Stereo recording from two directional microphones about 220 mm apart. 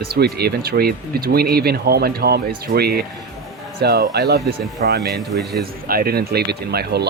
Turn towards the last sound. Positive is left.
turn(degrees=-45)  # may be behind; listen again after turning